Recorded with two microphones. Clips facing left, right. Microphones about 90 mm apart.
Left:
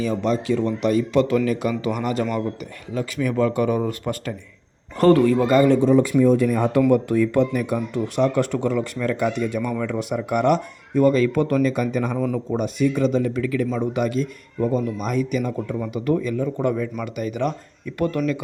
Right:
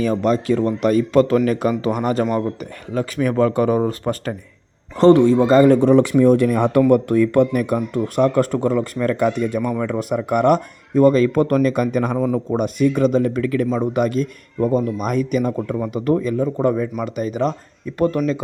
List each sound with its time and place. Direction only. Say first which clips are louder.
0.0 s speech: right 4 dB; 50° right (ahead or behind)
2.9 s speech: right 4 dB; 45° right (ahead or behind)
4.9 s a man's voice: right 4 dB; 25° right (ahead or behind)
5.6 s speech: right 3 dB; 55° right (ahead or behind); by 6.8 s 70° right (ahead or behind)
6.9 s speech: right 3 dB; 55° right (ahead or behind)
9.6 s a man's voice: right 3 dB; 20° right (ahead or behind)
9.8 s speech: right 3 dB; 45° right (ahead or behind)
12.1 s a man's voice: right 4 dB; 20° right (ahead or behind)
12.5 s speech: right 3 dB; 50° right (ahead or behind); by 18.2 s 30° right (ahead or behind)